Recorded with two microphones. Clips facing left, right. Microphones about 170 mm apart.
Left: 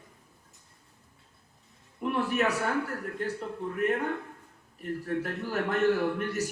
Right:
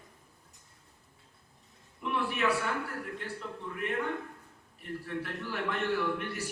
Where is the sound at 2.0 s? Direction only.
45° left (ahead or behind).